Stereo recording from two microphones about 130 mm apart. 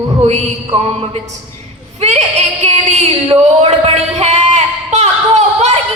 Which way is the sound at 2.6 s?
60° right (ahead or behind).